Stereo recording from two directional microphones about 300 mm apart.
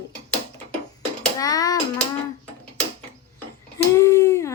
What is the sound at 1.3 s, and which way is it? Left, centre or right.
Speech, centre.